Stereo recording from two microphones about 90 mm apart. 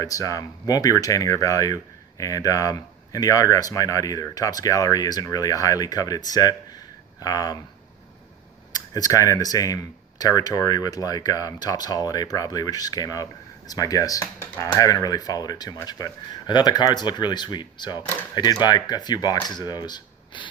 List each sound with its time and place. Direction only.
0.0 s speech: 40° left (ahead or behind)
8.7 s speech: 45° left (ahead or behind)